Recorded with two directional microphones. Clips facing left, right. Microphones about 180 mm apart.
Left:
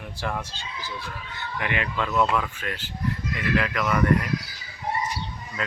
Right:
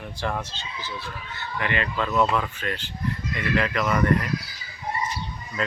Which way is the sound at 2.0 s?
Centre (ahead or behind).